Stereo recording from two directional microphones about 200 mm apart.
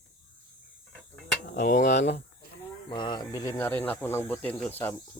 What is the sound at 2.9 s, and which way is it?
Speech, 20° left (ahead or behind).